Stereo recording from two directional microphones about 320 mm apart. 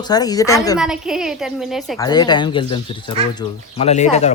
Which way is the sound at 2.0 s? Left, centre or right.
Centre.